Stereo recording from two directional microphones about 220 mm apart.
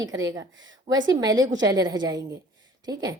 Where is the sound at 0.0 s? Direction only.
15° right (ahead or behind).